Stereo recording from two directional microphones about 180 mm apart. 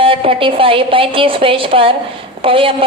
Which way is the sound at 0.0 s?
30° right (ahead or behind).